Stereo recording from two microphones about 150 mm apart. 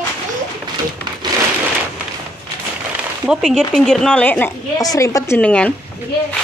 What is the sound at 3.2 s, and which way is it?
Speech, 5° right (ahead or behind).